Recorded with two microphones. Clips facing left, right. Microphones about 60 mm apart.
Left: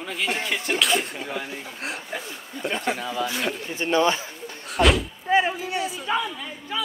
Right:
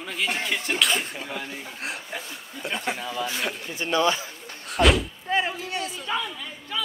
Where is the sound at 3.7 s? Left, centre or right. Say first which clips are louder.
Left 2 dB; left.